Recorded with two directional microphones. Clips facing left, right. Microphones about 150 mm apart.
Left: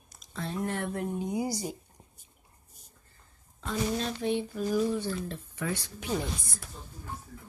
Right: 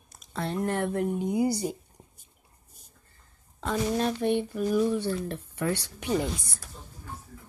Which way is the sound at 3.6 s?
60° right (ahead or behind).